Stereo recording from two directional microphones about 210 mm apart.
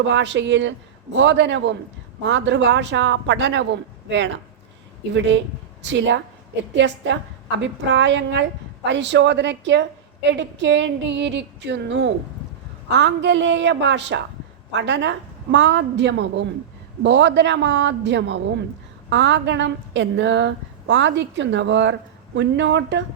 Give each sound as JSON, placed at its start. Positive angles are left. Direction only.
{"t": 0.0, "sound": "a woman's voice", "side_deg": -60}